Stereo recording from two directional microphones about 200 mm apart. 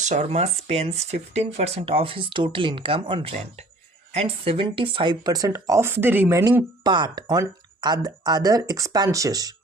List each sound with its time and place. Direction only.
0.0 s speech: 35° right (ahead or behind); by 9.6 s 20° right (ahead or behind)